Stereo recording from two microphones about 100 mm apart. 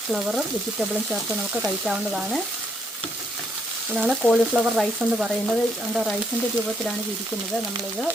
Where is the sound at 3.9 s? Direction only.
Centre (ahead or behind).